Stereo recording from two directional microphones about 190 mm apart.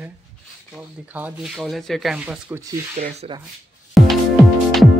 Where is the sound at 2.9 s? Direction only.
40° right (ahead or behind).